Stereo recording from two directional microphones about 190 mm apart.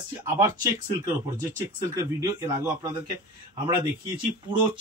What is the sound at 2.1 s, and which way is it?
Speech, 15° right (ahead or behind).